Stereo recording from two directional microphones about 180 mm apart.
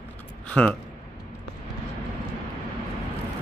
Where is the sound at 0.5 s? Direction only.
5° left (ahead or behind).